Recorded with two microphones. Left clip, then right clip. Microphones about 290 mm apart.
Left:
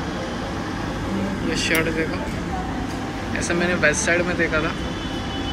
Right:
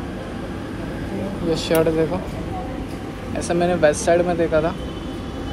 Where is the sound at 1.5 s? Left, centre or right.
Right.